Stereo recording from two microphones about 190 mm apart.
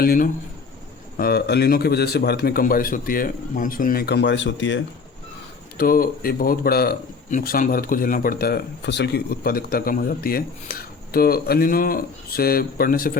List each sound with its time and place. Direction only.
0.0 s a man's voice: 50° left (ahead or behind); by 4.8 s 70° left (ahead or behind)
5.7 s speech: 50° left (ahead or behind)